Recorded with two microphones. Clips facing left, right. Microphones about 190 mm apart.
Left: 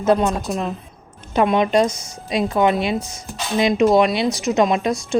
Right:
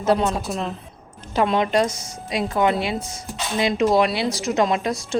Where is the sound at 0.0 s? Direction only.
15° left (ahead or behind).